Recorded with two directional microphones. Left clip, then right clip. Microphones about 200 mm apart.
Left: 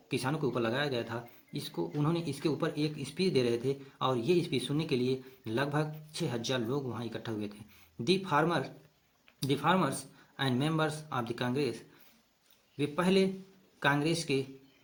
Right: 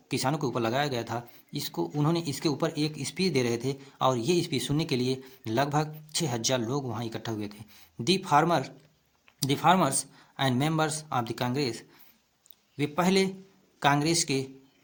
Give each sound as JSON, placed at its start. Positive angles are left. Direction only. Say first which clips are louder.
{"t": 0.1, "sound": "speech", "louder": "right 4 dB", "side_deg": -35}